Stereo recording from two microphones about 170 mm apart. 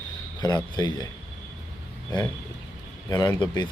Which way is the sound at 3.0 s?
20° left (ahead or behind).